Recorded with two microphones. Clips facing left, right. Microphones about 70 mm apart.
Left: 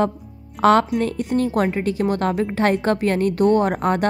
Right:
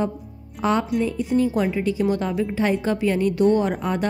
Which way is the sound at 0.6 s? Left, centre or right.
Left.